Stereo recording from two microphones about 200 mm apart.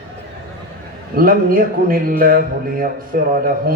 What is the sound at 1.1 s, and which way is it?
A man's voice, 45° right (ahead or behind).